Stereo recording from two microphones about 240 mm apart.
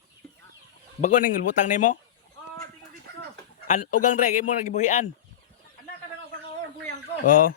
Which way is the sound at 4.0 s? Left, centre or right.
Left.